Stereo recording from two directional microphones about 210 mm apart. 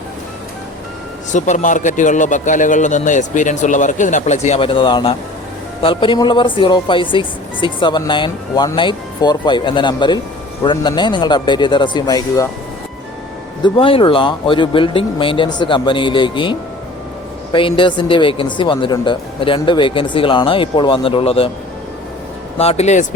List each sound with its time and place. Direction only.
1.3 s a man's voice: 35° left (ahead or behind); by 12.5 s 20° left (ahead or behind)
13.6 s speech: 25° left (ahead or behind)
22.5 s speech: 30° left (ahead or behind)